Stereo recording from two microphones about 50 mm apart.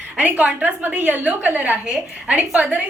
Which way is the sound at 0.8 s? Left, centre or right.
Right.